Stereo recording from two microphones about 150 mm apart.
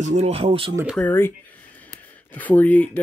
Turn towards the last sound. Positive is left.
turn(degrees=10)  # may be behind; listen again after turning